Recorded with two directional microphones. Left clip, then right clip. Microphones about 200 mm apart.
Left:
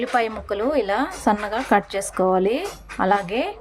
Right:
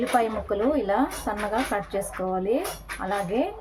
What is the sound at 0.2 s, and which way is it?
A woman's voice, 50° left (ahead or behind).